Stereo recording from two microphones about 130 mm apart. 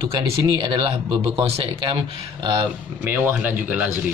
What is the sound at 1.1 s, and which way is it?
Speech, 50° right (ahead or behind).